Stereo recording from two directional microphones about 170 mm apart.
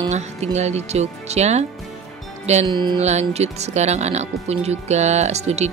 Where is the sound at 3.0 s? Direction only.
40° right (ahead or behind).